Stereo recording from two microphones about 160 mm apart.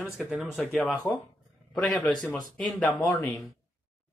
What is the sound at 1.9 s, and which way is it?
Speech, 5° left (ahead or behind).